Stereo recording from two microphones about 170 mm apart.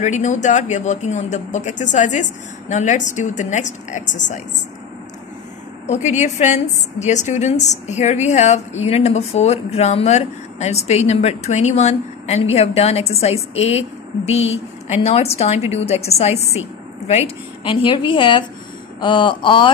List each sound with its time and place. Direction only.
0.0 s speech: 45° left (ahead or behind)
5.9 s a woman's voice: 45° left (ahead or behind)
17.6 s a woman's voice: 30° left (ahead or behind)